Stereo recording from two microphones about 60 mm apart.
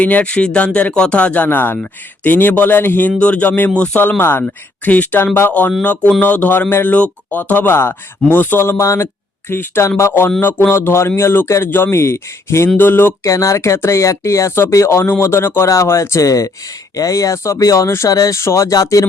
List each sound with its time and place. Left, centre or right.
0.0 s speech: left
1.5 s speech: left
3.2 s speech: left
8.8 s speech: left
9.5 s speech: left
12.6 s speech: left
13.2 s speech: left
15.7 s speech: left